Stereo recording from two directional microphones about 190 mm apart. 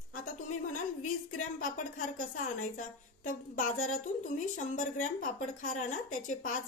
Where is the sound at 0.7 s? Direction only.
45° left (ahead or behind).